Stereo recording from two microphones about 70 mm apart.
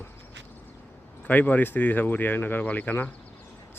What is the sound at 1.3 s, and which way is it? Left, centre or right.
Speech, left.